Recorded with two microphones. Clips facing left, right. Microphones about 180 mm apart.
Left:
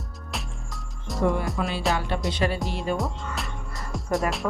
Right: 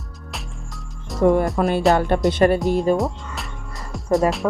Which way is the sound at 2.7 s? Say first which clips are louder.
Right 9 dB; 40° right (ahead or behind).